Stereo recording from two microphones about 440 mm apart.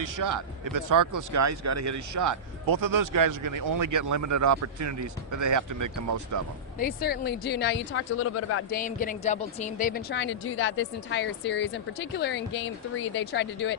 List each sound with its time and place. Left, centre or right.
0.0 s speech: right
6.7 s speech: centre
8.7 s speech: centre